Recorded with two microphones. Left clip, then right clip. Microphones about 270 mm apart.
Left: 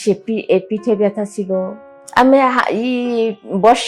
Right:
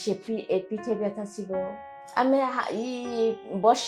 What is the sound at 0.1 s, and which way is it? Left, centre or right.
A woman's voice, left.